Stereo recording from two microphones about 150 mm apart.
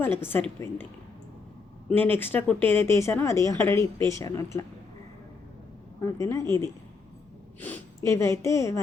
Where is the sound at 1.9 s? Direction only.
15° left (ahead or behind).